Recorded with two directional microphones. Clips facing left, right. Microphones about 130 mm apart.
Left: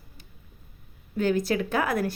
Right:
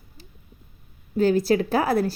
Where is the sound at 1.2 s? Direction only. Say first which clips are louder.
Right 5 dB; 35° right (ahead or behind).